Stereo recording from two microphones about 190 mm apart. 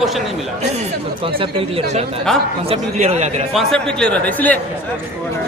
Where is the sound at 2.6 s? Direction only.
35° right (ahead or behind).